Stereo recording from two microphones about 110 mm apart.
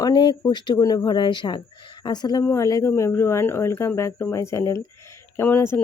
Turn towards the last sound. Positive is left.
turn(degrees=20)  # may be behind; listen again after turning